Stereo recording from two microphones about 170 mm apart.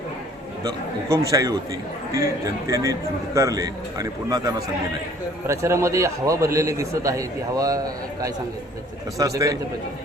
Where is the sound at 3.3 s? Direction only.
20° right (ahead or behind).